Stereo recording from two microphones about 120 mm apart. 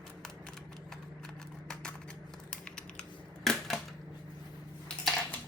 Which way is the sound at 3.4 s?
5° left (ahead or behind).